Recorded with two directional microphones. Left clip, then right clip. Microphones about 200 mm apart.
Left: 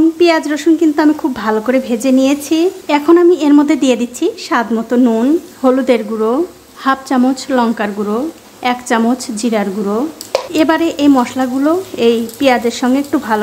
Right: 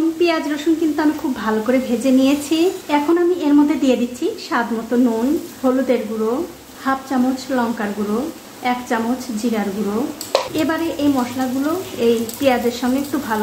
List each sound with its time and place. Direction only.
0.2 s a woman's voice: 35° left (ahead or behind)
2.9 s a woman's voice: 40° left (ahead or behind)